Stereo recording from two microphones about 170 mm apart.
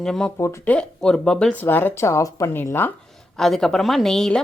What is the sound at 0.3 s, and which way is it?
Speech, 15° left (ahead or behind).